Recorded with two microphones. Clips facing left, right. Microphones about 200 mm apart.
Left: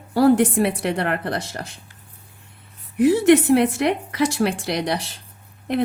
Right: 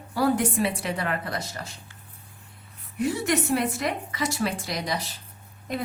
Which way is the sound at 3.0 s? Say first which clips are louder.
Left 11 dB; 75° left (ahead or behind).